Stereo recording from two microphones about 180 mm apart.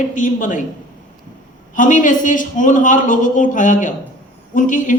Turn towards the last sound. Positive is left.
turn(degrees=45)  # may be behind; listen again after turning